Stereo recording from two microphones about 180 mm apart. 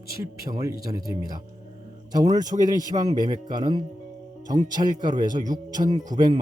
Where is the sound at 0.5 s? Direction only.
20° right (ahead or behind).